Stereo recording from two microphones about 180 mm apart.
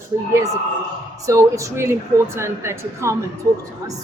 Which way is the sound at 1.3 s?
15° right (ahead or behind).